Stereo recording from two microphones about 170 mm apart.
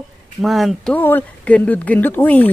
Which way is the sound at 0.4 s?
Centre (ahead or behind).